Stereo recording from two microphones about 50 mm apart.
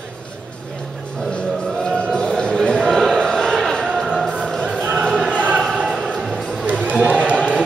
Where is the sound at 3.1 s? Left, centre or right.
Centre.